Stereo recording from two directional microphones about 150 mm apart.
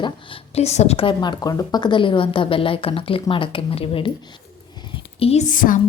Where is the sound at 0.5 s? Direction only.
45° left (ahead or behind).